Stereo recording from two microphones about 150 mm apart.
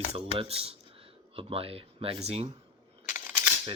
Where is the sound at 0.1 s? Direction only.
40° right (ahead or behind).